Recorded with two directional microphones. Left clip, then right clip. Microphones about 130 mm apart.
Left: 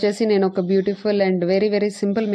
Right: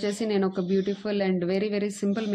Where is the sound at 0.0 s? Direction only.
50° left (ahead or behind).